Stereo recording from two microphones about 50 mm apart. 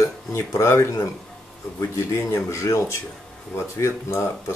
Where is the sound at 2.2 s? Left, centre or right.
Left.